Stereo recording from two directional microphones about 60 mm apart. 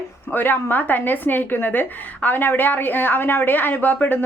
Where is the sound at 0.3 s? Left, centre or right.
Left.